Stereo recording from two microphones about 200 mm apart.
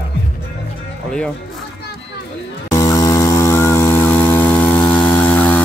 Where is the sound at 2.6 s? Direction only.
15° left (ahead or behind).